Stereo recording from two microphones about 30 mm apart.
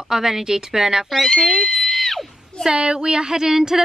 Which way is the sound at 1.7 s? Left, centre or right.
Centre.